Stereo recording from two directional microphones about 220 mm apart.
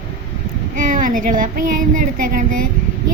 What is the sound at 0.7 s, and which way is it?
A woman's voice, 35° right (ahead or behind).